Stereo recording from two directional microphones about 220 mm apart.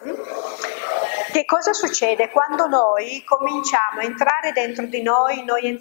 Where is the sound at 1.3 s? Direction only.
20° left (ahead or behind).